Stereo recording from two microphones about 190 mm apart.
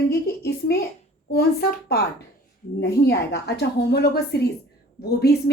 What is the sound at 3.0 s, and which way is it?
A woman's voice, 60° left (ahead or behind).